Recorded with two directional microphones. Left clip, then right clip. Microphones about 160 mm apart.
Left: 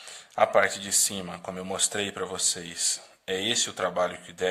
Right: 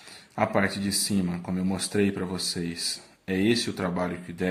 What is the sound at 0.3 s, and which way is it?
Speech, 35° left (ahead or behind).